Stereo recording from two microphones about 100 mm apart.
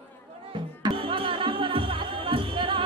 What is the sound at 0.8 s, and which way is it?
Music, 65° right (ahead or behind).